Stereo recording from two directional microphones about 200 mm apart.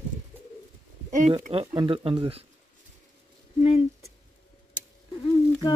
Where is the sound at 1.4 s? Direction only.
30° right (ahead or behind).